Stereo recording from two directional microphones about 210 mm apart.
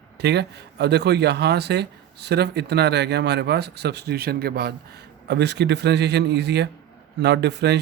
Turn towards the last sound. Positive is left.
turn(degrees=-55)  # may be behind; listen again after turning